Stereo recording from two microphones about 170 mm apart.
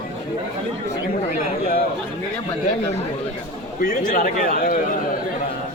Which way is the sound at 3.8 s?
50° left (ahead or behind).